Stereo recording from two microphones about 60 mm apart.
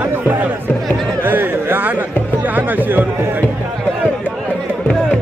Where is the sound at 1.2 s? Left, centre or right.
Right.